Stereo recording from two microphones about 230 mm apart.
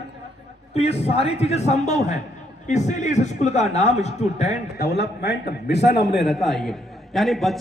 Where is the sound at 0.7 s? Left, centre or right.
Left.